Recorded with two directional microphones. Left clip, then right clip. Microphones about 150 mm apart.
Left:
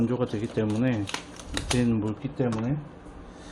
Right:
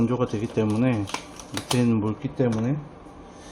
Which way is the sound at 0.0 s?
20° right (ahead or behind).